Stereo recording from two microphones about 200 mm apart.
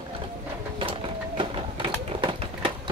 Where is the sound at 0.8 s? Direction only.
25° right (ahead or behind).